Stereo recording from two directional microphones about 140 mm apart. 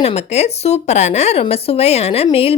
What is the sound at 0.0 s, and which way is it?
A woman's voice, 50° left (ahead or behind).